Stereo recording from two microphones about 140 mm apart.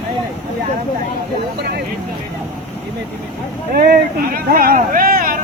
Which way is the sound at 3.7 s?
90° right.